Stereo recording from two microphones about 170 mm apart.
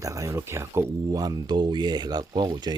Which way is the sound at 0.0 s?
20° right (ahead or behind).